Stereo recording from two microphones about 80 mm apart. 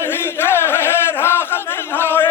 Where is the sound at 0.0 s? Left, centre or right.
Left.